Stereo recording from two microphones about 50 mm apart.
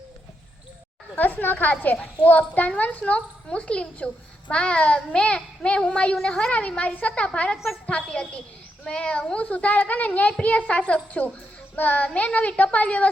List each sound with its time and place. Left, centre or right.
1.1 s a child's voice: left
6.1 s a woman's voice: centre
6.5 s a child's voice: left